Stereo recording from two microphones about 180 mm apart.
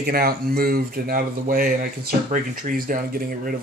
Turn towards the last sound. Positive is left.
turn(degrees=-55)  # may be behind; listen again after turning